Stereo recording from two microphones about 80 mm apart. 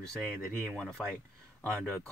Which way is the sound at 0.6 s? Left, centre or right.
Centre.